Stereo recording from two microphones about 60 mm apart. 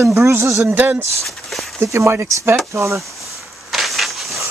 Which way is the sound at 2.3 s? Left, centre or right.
Right.